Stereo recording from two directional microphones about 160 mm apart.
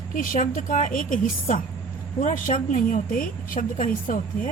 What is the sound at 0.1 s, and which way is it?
Speech, 55° left (ahead or behind).